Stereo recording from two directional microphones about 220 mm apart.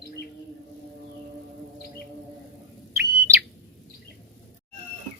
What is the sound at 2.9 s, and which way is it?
Bird, 10° right (ahead or behind).